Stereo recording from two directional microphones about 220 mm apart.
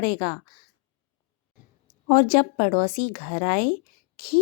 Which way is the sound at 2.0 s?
35° left (ahead or behind).